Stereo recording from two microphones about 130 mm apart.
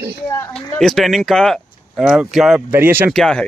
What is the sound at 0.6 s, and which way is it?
Speech, 5° left (ahead or behind).